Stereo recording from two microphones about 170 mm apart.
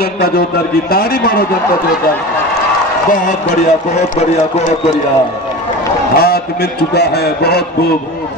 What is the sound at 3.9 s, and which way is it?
Speech, 40° left (ahead or behind).